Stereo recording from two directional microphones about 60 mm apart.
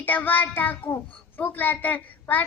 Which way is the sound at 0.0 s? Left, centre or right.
Left.